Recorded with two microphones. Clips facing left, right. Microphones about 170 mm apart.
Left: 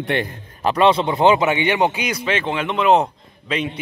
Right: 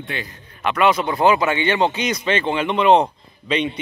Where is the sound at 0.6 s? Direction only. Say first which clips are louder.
Left 2 dB; 30° left (ahead or behind).